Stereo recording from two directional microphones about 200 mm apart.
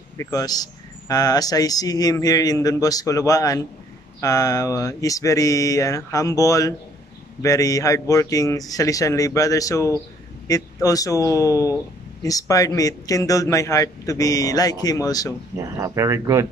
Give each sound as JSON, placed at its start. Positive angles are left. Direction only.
{"t": 0.2, "sound": "speech", "side_deg": 20}
{"t": 15.5, "sound": "speech", "side_deg": -15}